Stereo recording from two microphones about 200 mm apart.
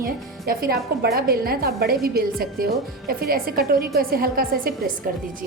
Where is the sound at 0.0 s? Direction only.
45° right (ahead or behind).